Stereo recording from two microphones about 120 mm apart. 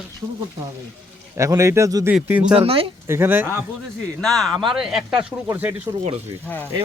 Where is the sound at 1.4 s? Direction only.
25° right (ahead or behind).